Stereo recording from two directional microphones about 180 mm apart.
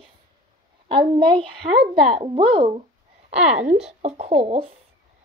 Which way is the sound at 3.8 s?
35° right (ahead or behind).